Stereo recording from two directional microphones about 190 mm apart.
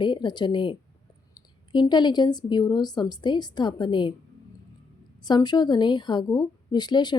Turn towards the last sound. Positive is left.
turn(degrees=20)  # may be behind; listen again after turning